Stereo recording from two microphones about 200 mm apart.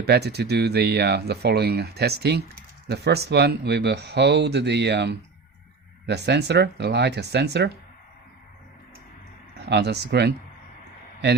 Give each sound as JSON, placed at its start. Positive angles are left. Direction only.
{"t": 0.0, "sound": "speech", "side_deg": -55}
{"t": 9.6, "sound": "speech", "side_deg": -55}